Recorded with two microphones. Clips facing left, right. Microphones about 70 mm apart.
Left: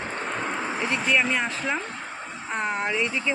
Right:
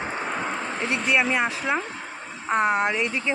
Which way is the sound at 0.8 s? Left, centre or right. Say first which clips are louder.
Right 1 dB; centre.